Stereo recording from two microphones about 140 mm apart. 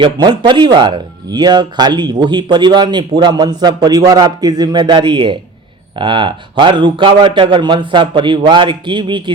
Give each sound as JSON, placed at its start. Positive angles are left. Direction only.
{"t": 0.0, "sound": "speech", "side_deg": -35}